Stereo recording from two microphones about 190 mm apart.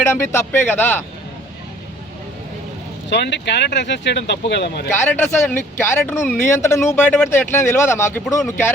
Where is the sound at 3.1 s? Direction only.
65° left (ahead or behind).